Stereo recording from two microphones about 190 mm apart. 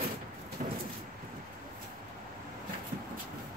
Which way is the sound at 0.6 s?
40° right (ahead or behind).